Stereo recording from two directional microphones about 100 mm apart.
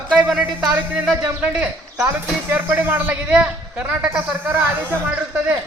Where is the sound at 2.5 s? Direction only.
20° right (ahead or behind).